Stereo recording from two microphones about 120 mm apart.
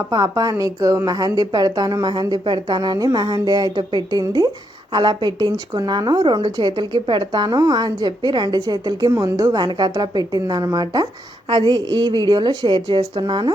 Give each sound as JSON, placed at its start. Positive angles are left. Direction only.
{"t": 0.1, "sound": "a woman's voice", "side_deg": -30}